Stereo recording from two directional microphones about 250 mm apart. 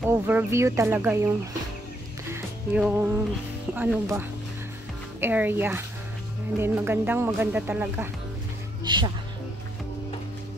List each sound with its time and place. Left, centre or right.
0.0 s speech: centre
2.3 s music: centre
3.7 s speech: centre
8.8 s speech: centre